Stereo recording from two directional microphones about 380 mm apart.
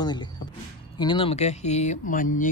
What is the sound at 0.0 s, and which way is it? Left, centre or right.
Speech, centre.